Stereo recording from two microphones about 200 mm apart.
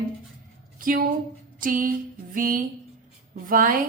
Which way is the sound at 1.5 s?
45° right (ahead or behind).